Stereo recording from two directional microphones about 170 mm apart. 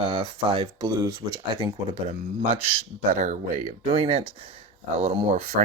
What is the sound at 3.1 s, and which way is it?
Speech, 45° right (ahead or behind).